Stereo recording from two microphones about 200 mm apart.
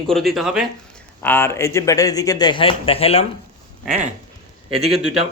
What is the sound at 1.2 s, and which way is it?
A man's voice, 10° left (ahead or behind).